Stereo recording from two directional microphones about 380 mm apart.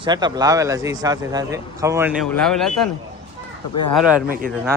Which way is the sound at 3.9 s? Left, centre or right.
Centre.